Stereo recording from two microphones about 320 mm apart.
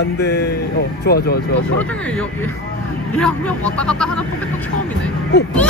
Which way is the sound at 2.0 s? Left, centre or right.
Centre.